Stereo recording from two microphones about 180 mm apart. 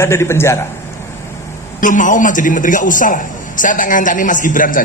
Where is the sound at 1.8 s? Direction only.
45° left (ahead or behind).